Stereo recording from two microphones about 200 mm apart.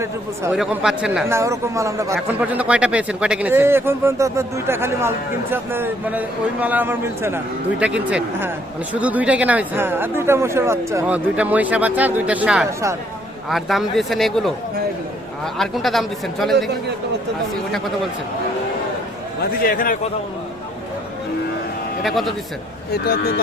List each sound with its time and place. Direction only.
0.5 s speech: 5° right (ahead or behind)
1.4 s a man's voice: 15° right (ahead or behind)
13.5 s speech: centre (ahead or behind)
15.5 s speech: centre (ahead or behind)
19.6 s speech: 45° left (ahead or behind)
22.0 s speech: centre (ahead or behind)
22.9 s speech: 50° left (ahead or behind)